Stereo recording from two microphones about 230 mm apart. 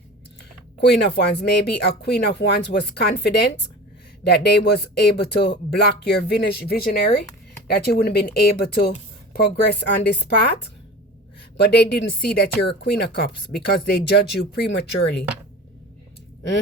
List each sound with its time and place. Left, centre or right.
0.8 s speech: left